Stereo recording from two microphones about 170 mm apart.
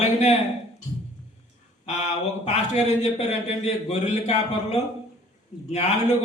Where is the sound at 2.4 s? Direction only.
45° left (ahead or behind).